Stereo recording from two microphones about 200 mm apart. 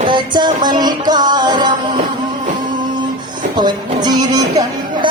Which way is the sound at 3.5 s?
20° right (ahead or behind).